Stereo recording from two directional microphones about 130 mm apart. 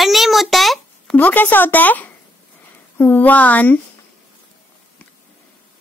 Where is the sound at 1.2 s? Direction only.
15° left (ahead or behind).